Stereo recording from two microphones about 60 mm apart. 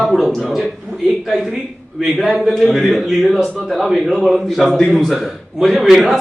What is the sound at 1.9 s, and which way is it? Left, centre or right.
A man's voice, centre.